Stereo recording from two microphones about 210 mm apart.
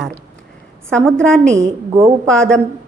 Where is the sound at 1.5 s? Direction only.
35° right (ahead or behind).